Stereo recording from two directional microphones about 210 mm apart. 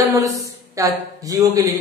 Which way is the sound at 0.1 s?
15° right (ahead or behind).